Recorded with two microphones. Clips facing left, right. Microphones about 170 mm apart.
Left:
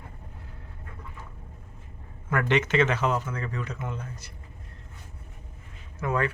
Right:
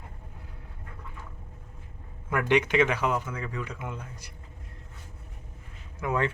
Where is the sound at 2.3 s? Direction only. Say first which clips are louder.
Even; 15° right (ahead or behind).